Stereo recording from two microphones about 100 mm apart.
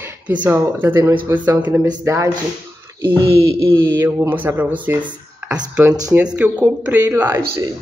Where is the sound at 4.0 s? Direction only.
20° right (ahead or behind).